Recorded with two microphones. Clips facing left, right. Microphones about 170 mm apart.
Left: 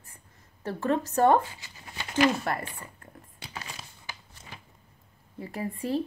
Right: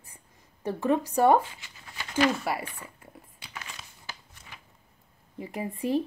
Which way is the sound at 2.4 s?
10° right (ahead or behind).